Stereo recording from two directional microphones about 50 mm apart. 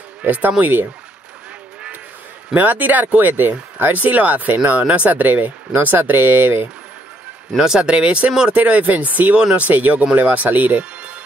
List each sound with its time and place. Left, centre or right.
0.2 s speech: right
2.5 s speech: right
7.5 s speech: centre
7.9 s speech: right
9.4 s speech: centre
9.7 s speech: right